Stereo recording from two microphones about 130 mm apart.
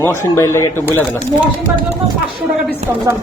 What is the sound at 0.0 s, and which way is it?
Speech, 20° left (ahead or behind).